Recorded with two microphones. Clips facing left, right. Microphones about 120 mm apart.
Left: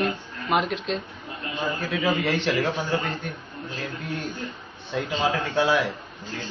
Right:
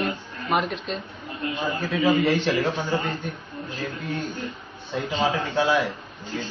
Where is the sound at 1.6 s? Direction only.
15° right (ahead or behind).